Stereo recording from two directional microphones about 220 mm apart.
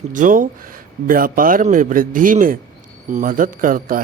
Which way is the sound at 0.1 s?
35° right (ahead or behind).